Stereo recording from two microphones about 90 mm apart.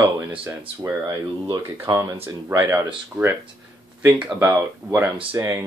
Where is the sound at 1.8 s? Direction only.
35° right (ahead or behind).